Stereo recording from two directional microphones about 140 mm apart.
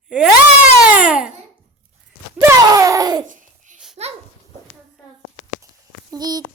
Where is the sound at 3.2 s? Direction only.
65° right (ahead or behind).